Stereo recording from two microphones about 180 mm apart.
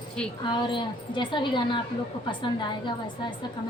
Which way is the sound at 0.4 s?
25° left (ahead or behind).